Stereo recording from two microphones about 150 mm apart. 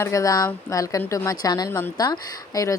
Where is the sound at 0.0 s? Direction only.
20° left (ahead or behind).